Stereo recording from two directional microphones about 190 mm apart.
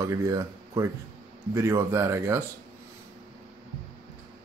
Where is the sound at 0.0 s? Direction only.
15° right (ahead or behind).